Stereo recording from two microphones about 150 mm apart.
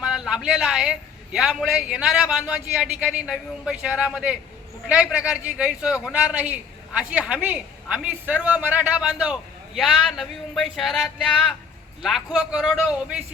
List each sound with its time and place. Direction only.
0.0 s a man's voice: 5° right (ahead or behind)